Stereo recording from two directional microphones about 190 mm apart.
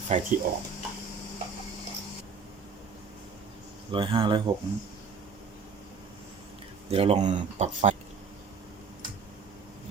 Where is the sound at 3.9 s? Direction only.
25° right (ahead or behind).